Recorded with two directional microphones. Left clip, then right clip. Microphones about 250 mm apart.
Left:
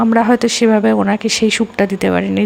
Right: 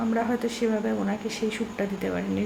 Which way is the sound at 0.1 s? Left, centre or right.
Left.